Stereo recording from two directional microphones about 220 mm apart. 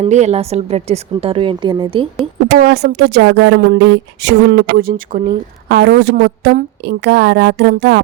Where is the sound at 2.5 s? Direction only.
50° right (ahead or behind).